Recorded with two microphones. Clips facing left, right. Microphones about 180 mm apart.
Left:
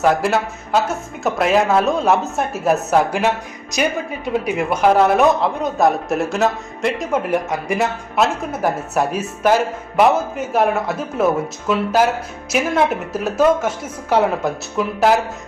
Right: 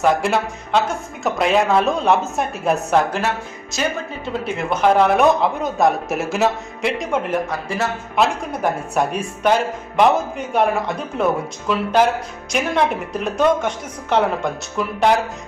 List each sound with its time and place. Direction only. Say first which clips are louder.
0.0 s speech: left 1 dB; centre (ahead or behind)